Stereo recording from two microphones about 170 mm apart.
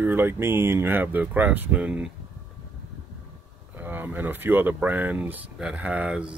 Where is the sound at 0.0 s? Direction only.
10° right (ahead or behind).